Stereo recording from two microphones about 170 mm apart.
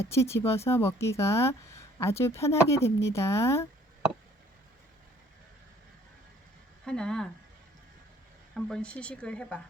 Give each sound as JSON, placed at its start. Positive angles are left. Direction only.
{"t": 0.1, "sound": "speech", "side_deg": 15}
{"t": 6.8, "sound": "speech", "side_deg": 5}
{"t": 8.5, "sound": "speech", "side_deg": 5}